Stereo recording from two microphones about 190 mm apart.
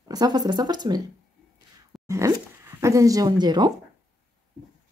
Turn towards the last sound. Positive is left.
turn(degrees=-20)  # may be behind; listen again after turning